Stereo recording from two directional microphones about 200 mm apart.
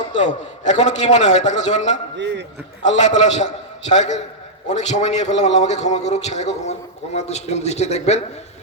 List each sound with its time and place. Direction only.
0.2 s a man's voice: 35° left (ahead or behind)
2.1 s a man's voice: 60° right (ahead or behind)
2.8 s a man's voice: 35° left (ahead or behind)